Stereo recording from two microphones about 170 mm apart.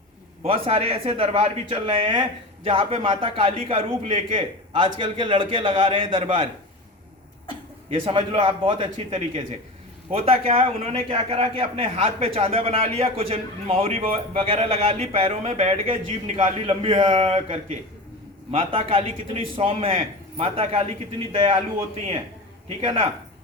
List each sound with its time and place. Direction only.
0.4 s a man's voice: 35° right (ahead or behind)
7.9 s a man's voice: 30° right (ahead or behind)